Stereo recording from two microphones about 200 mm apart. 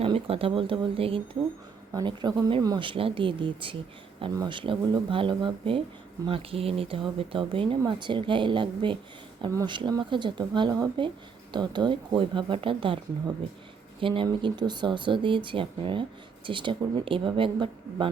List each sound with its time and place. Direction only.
0.0 s speech: 30° right (ahead or behind)